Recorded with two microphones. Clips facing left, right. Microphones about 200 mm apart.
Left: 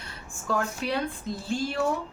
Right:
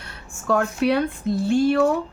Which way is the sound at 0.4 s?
65° right (ahead or behind).